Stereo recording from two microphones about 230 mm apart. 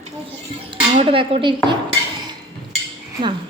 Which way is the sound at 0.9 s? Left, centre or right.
Right.